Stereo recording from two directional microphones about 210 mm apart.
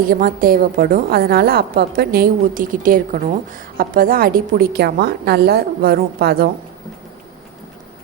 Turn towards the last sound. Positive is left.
turn(degrees=-45)  # may be behind; listen again after turning